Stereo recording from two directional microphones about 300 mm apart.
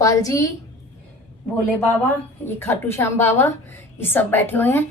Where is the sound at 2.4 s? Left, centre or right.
Centre.